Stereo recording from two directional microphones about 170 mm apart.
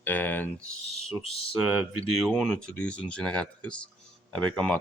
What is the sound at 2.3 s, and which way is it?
Speech, 5° left (ahead or behind).